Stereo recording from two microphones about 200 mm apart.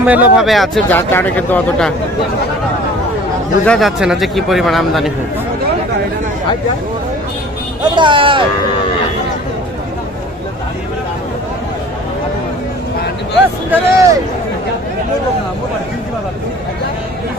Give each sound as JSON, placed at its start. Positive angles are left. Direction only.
{"t": 0.0, "sound": "speech", "side_deg": -5}
{"t": 3.6, "sound": "speech", "side_deg": 0}
{"t": 7.9, "sound": "speech", "side_deg": -25}
{"t": 13.7, "sound": "a man's voice", "side_deg": -15}